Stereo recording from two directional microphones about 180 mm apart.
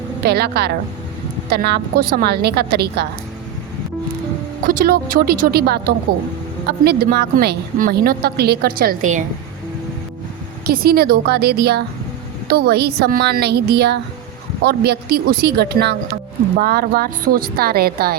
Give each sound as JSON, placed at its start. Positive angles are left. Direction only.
{"t": 0.2, "sound": "a woman's voice", "side_deg": -60}
{"t": 4.6, "sound": "a woman's voice", "side_deg": -50}
{"t": 10.7, "sound": "a woman's voice", "side_deg": -60}